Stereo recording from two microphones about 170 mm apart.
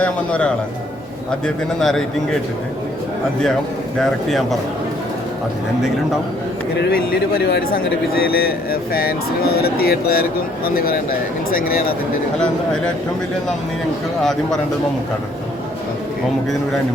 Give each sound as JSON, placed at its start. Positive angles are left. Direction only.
{"t": 0.0, "sound": "a man's voice", "side_deg": 5}
{"t": 4.0, "sound": "speech", "side_deg": 0}
{"t": 6.7, "sound": "speech", "side_deg": 70}